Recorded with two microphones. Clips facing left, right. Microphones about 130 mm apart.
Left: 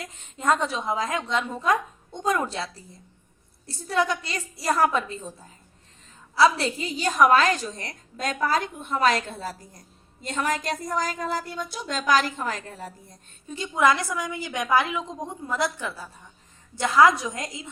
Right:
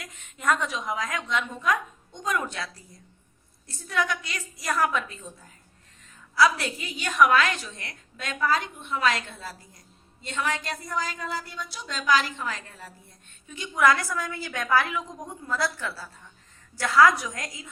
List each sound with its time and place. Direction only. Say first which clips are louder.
0.0 s a woman's voice: left 2 dB; 30° left (ahead or behind)